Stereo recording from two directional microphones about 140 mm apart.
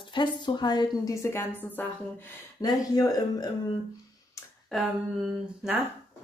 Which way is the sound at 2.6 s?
25° left (ahead or behind).